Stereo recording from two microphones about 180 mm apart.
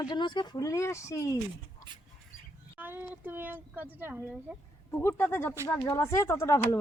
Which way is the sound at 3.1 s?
10° right (ahead or behind).